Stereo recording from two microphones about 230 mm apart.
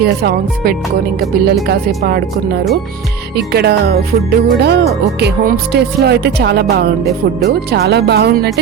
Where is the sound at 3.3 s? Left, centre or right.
Right.